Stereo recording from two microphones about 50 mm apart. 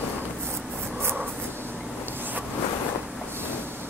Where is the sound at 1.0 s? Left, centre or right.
Right.